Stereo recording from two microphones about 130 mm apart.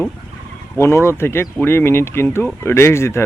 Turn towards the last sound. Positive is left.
turn(degrees=20)  # may be behind; listen again after turning